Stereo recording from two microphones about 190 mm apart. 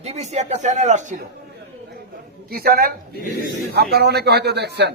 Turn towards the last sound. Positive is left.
turn(degrees=-60)  # may be behind; listen again after turning